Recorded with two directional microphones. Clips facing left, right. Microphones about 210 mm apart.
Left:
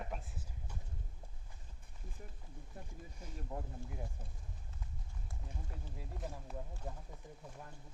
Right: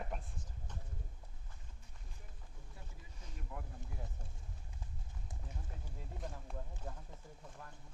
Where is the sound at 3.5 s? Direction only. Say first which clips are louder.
Left 5 dB; 40° left (ahead or behind).